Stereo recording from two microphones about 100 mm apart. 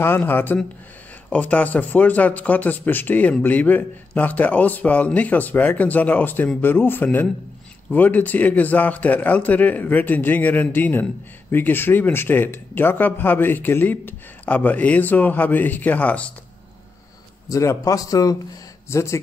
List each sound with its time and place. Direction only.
0.0 s speech: 20° left (ahead or behind)
17.5 s speech: 35° left (ahead or behind)